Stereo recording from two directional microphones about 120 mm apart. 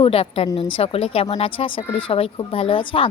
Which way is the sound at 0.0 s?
50° left (ahead or behind).